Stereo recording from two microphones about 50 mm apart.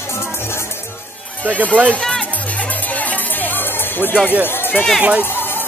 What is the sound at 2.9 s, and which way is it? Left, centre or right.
Music, left.